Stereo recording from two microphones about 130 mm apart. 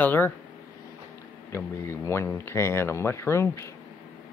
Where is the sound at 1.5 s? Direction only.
20° left (ahead or behind).